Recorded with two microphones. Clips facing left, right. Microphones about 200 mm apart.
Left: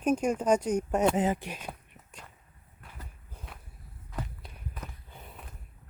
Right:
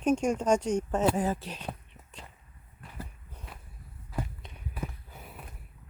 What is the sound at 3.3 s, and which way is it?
Walk, centre (ahead or behind).